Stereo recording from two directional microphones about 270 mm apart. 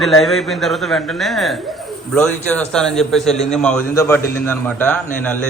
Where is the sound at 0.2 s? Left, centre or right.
Centre.